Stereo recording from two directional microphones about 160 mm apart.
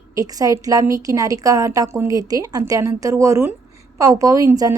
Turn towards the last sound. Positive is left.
turn(degrees=-20)  # may be behind; listen again after turning